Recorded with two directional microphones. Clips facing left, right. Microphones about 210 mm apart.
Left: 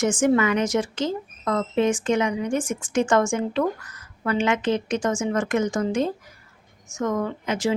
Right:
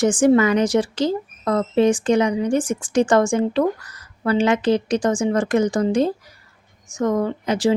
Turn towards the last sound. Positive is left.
turn(degrees=-35)  # may be behind; listen again after turning